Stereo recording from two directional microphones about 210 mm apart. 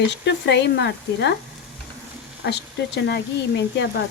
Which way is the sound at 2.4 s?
55° left (ahead or behind).